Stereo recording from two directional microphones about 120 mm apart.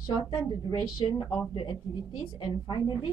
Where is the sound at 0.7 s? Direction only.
35° left (ahead or behind).